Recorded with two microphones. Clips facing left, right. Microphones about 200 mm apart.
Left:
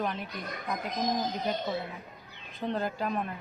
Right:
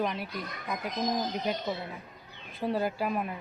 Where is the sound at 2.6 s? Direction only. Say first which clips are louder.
Right 2 dB; 5° right (ahead or behind).